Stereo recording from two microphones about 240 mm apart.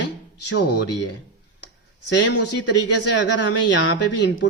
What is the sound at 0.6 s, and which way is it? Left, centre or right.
Speech, left.